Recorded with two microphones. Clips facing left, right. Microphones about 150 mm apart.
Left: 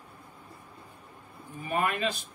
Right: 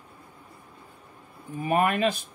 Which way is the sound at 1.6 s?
55° right (ahead or behind).